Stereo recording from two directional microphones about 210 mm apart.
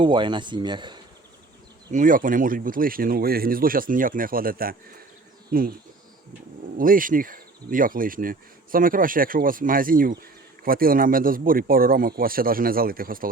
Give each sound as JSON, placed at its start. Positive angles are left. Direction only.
{"t": 0.0, "sound": "speech", "side_deg": -25}
{"t": 1.9, "sound": "speech", "side_deg": -40}
{"t": 6.7, "sound": "speech", "side_deg": -40}